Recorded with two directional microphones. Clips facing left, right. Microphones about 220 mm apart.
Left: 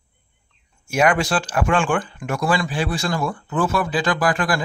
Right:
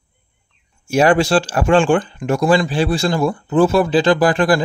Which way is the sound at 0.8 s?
30° right (ahead or behind).